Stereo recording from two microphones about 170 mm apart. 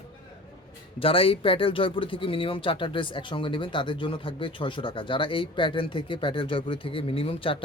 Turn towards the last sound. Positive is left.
turn(degrees=35)  # may be behind; listen again after turning